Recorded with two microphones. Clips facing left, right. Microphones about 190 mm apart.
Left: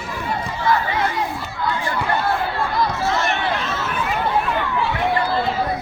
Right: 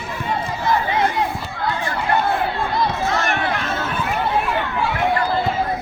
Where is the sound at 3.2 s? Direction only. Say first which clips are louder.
Even; 55° right (ahead or behind).